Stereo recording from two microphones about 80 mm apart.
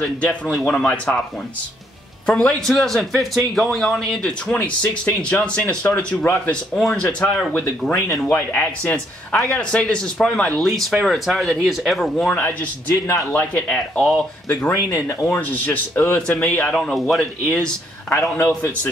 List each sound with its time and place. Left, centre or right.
0.0 s speech: centre
2.2 s a man's voice: centre
4.6 s speech: centre
6.7 s speech: centre
7.8 s a man's voice: centre
8.3 s speech: left
8.8 s speech: centre
10.8 s a man's voice: centre
12.4 s speech: left
13.7 s speech: centre
14.5 s speech: left
16.2 s speech: centre
16.7 s a man's voice: centre